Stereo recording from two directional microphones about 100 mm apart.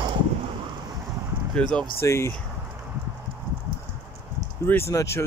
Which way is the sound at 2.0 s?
30° left (ahead or behind).